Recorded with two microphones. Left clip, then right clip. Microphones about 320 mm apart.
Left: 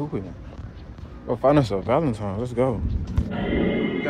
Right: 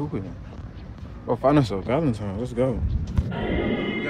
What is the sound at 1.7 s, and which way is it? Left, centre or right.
Speech, centre.